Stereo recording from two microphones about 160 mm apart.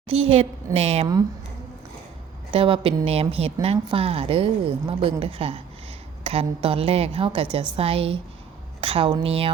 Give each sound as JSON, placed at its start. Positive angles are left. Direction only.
{"t": 0.1, "sound": "a woman's voice", "side_deg": -40}
{"t": 2.5, "sound": "a woman's voice", "side_deg": -35}